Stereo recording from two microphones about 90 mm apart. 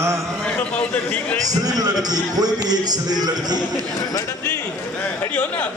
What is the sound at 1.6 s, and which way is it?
Speech, 45° right (ahead or behind).